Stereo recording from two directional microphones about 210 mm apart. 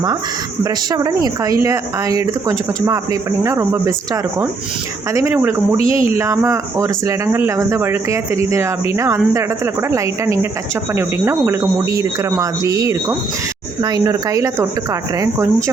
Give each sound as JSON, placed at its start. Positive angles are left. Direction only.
{"t": 0.6, "sound": "speech", "side_deg": -15}